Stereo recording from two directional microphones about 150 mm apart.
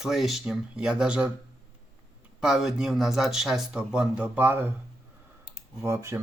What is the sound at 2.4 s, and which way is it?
Speech, 5° right (ahead or behind).